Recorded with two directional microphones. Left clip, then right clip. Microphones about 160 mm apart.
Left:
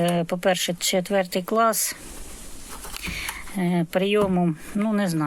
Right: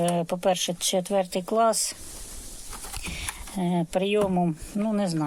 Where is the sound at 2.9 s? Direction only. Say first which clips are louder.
Left 5 dB; centre (ahead or behind).